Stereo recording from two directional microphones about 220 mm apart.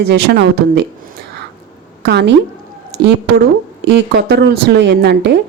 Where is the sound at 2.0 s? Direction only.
50° right (ahead or behind).